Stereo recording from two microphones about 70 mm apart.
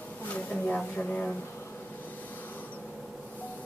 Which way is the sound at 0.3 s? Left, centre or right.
Centre.